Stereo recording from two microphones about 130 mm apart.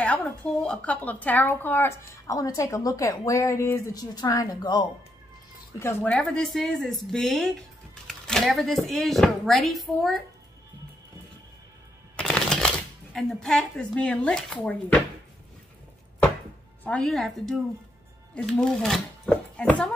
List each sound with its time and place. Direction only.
0.0 s speech: 10° left (ahead or behind); by 4.8 s 30° left (ahead or behind)
5.8 s speech: 15° left (ahead or behind); by 10.2 s centre (ahead or behind)
12.2 s speech: 5° left (ahead or behind)
16.8 s speech: 5° left (ahead or behind)